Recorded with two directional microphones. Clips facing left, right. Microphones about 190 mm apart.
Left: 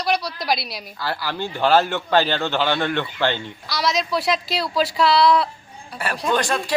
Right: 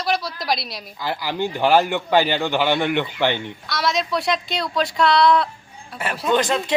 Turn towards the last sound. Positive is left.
turn(degrees=-20)  # may be behind; listen again after turning